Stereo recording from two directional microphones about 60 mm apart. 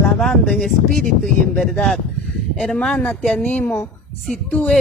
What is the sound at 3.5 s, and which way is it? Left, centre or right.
Speech, left.